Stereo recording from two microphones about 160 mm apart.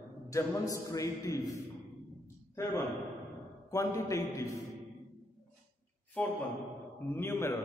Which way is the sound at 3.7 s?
20° left (ahead or behind).